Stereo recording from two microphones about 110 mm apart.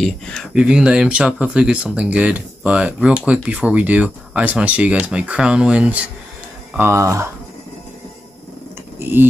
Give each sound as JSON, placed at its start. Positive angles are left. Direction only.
{"t": 0.6, "sound": "speech", "side_deg": -10}
{"t": 6.8, "sound": "speech", "side_deg": -25}
{"t": 9.0, "sound": "speech", "side_deg": -20}